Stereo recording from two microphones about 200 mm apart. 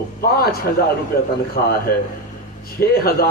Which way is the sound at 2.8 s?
50° left (ahead or behind).